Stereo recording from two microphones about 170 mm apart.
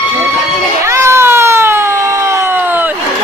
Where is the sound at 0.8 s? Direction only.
15° right (ahead or behind).